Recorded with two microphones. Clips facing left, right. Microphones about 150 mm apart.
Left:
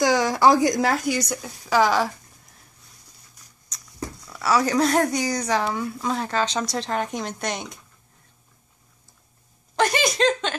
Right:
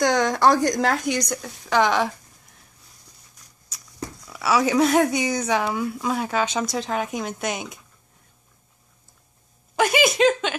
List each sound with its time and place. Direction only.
0.0 s speech: 5° left (ahead or behind)
3.7 s a sound: 5° right (ahead or behind)
4.3 s speech: 5° right (ahead or behind)
9.8 s speech: 5° right (ahead or behind)